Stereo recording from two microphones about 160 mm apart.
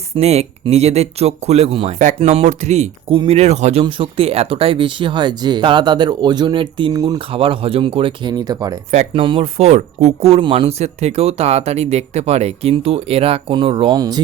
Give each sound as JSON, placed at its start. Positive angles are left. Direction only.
{"t": 0.2, "sound": "speech", "side_deg": -40}
{"t": 2.0, "sound": "speech", "side_deg": -50}
{"t": 8.9, "sound": "speech", "side_deg": -40}